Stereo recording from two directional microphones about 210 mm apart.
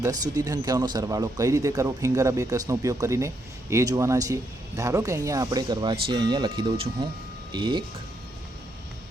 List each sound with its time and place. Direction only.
0.0 s speech: 15° right (ahead or behind)